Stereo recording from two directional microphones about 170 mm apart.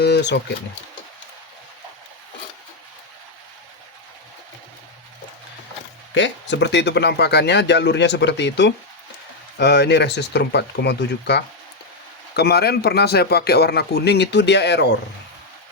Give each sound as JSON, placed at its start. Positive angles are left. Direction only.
{"t": 0.0, "sound": "a sound", "side_deg": 85}
{"t": 6.1, "sound": "speech", "side_deg": 90}
{"t": 12.4, "sound": "speech", "side_deg": 70}